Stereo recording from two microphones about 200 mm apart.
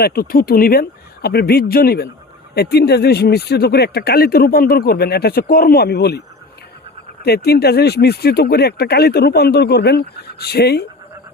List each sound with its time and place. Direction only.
0.0 s speech: 50° left (ahead or behind)